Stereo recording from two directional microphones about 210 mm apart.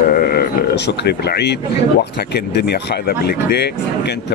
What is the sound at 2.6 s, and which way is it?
Speech, 50° left (ahead or behind).